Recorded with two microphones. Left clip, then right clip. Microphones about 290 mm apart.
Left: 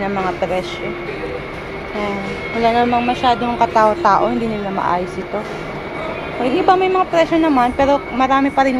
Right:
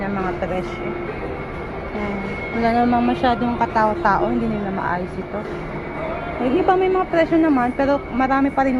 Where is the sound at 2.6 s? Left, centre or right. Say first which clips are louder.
Left 3 dB; centre.